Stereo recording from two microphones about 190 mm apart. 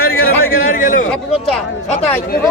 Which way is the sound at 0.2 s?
90° left.